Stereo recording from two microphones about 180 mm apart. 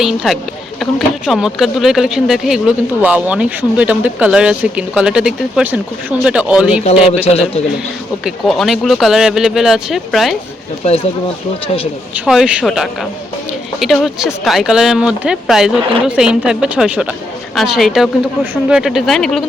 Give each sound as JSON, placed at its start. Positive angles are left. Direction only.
{"t": 0.0, "sound": "speech", "side_deg": 0}
{"t": 7.3, "sound": "speech", "side_deg": 35}
{"t": 8.2, "sound": "speech", "side_deg": 0}
{"t": 10.8, "sound": "speech", "side_deg": 35}
{"t": 12.1, "sound": "speech", "side_deg": -5}